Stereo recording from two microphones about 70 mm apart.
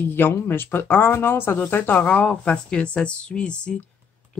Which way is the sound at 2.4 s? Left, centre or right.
Centre.